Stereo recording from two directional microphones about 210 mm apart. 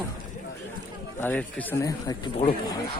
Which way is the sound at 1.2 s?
10° left (ahead or behind).